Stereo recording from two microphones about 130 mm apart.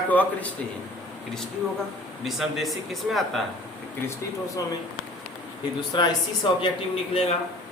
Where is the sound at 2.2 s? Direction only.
Centre (ahead or behind).